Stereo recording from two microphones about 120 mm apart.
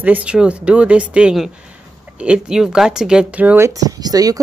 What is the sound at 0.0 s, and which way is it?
Speech, 10° right (ahead or behind).